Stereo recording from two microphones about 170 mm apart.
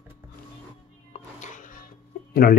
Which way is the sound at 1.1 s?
45° left (ahead or behind).